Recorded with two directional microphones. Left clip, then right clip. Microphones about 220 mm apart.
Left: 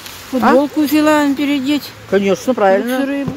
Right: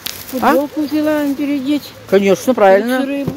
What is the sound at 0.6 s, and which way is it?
Speech, 55° left (ahead or behind).